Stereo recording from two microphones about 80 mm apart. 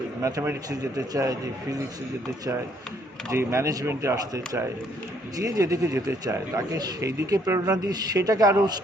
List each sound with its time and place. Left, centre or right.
0.2 s speech: right
3.3 s speech: right